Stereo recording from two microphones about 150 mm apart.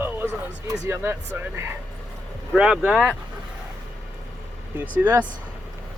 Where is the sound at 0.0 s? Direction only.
15° right (ahead or behind).